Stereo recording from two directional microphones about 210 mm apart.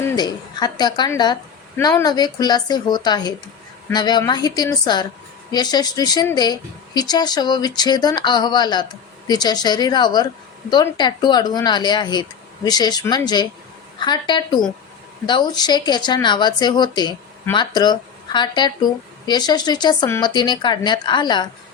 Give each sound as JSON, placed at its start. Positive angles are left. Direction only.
{"t": 0.0, "sound": "speech", "side_deg": 20}